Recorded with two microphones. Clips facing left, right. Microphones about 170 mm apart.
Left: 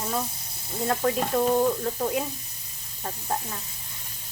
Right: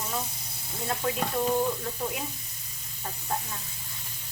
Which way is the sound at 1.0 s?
40° left (ahead or behind).